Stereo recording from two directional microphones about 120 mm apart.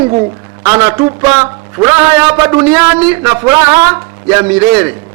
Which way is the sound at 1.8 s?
30° right (ahead or behind).